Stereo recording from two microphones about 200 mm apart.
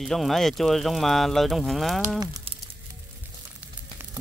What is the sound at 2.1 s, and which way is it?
Speech, 20° right (ahead or behind).